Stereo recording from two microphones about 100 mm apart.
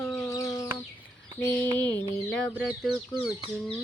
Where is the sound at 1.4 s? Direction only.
25° left (ahead or behind).